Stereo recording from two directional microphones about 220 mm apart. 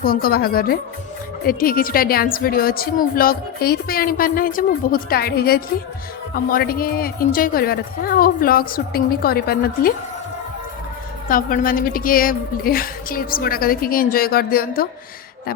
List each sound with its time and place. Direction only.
0.0 s a woman's voice: 40° left (ahead or behind)
11.3 s a woman's voice: 40° left (ahead or behind)